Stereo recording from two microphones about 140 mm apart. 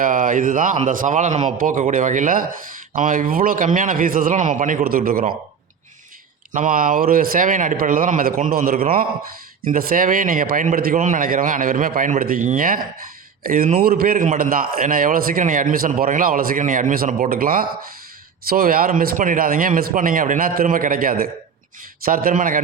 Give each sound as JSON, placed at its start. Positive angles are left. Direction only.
{"t": 0.0, "sound": "speech", "side_deg": -70}
{"t": 6.5, "sound": "speech", "side_deg": -70}
{"t": 13.8, "sound": "speech", "side_deg": -90}